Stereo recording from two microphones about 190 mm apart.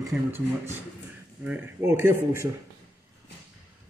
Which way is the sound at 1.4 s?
10° right (ahead or behind).